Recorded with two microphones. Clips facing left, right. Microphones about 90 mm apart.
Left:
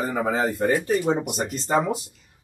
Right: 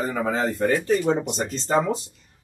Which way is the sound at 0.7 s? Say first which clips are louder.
Right 2 dB; 5° left (ahead or behind).